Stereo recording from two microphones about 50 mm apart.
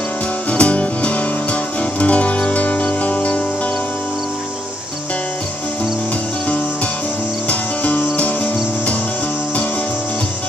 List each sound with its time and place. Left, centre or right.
0.5 s music: left
7.4 s cricket: left